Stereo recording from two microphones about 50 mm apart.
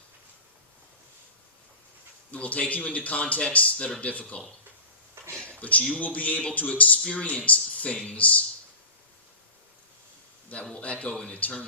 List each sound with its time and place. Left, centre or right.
2.3 s speech: left
5.5 s a sound: left
6.0 s speech: left
10.8 s speech: left